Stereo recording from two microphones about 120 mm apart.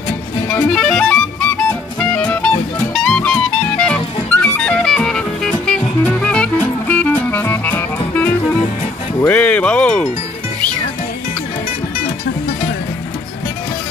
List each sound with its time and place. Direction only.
0.5 s music: 5° left (ahead or behind)
9.2 s speech: 10° left (ahead or behind)